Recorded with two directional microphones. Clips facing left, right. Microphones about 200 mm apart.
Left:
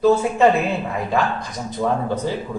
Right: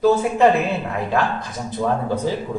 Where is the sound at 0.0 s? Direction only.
Centre (ahead or behind).